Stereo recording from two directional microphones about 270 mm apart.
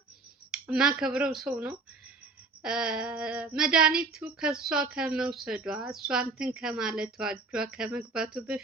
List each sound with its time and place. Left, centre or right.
0.5 s speech: centre